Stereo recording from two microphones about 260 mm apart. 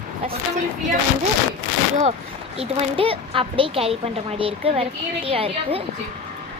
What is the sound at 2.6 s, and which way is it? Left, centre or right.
A woman's voice, right.